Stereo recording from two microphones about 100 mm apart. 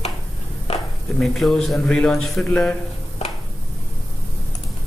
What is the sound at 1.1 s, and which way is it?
A man's voice, 5° left (ahead or behind).